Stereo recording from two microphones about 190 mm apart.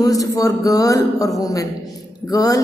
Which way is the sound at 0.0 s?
20° left (ahead or behind).